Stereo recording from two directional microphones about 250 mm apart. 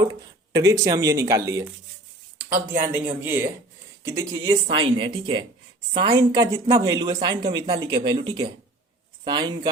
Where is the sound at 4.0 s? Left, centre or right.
Centre.